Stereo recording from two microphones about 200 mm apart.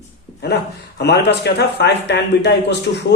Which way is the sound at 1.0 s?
55° left (ahead or behind).